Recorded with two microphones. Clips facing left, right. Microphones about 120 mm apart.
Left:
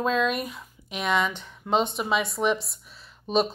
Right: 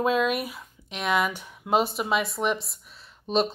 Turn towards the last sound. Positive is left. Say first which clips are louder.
# left 1 dB
turn(degrees=0)  # may be behind; listen again after turning